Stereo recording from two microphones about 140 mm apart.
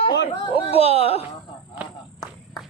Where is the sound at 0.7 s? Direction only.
45° left (ahead or behind).